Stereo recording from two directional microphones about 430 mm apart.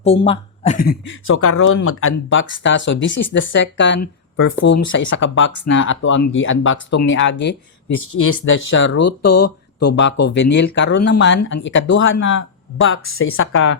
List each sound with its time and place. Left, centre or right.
0.0 s speech: centre